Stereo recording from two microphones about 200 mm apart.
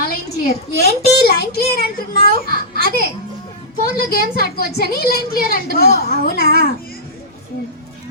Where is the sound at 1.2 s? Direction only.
50° left (ahead or behind).